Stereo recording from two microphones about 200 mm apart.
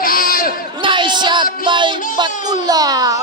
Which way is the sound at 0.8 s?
25° right (ahead or behind).